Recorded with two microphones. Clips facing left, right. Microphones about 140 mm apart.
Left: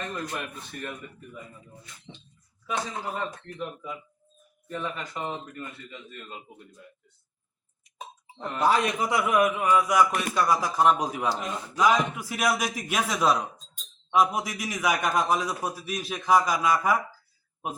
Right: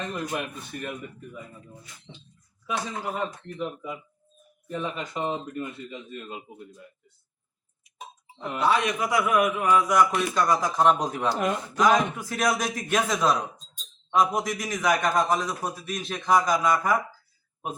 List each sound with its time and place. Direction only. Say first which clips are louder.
0.1 s speech: right 3 dB; 15° right (ahead or behind)
2.6 s speech: right 1 dB; 10° right (ahead or behind)
8.5 s speech: even; 40° left (ahead or behind)
9.0 s a man's voice: even; 25° left (ahead or behind); by 11.3 s 10° left (ahead or behind)
11.3 s speech: right 7 dB; 60° right (ahead or behind)
12.1 s a man's voice: right 1 dB; 10° left (ahead or behind)